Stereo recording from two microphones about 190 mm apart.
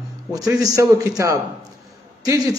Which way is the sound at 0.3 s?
20° right (ahead or behind).